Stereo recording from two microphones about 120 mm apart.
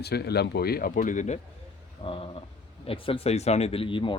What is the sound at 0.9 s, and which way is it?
Speech, 90° left.